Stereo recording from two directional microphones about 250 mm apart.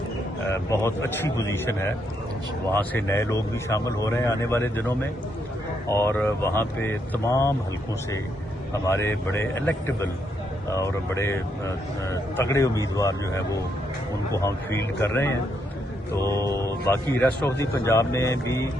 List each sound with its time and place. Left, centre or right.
0.7 s speech: centre
8.7 s speech: centre
14.3 s speech: centre